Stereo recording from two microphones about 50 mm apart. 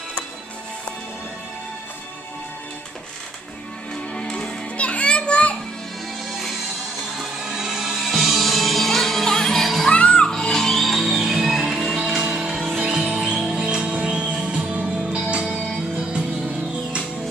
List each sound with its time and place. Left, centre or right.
4.1 s music: centre
7.2 s music: centre
9.8 s music: left
10.3 s music: centre; by 17.0 s right